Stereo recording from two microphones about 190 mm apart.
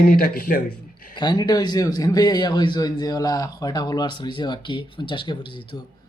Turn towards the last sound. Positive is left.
turn(degrees=25)  # may be behind; listen again after turning